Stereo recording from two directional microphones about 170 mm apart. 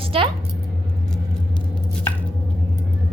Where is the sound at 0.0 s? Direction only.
30° right (ahead or behind).